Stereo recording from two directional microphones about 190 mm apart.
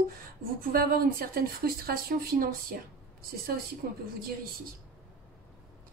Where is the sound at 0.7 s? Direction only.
50° right (ahead or behind).